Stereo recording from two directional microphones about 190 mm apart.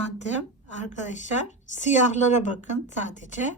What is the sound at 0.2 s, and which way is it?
A woman's voice, 40° left (ahead or behind).